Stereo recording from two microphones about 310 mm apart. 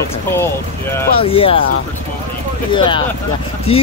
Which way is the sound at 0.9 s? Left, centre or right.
Centre.